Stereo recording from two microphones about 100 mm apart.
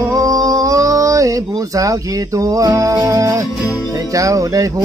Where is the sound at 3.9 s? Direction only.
35° right (ahead or behind).